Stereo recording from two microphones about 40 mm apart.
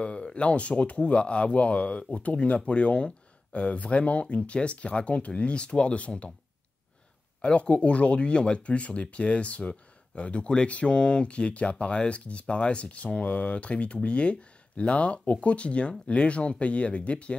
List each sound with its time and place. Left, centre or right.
0.0 s speech: left
7.4 s speech: left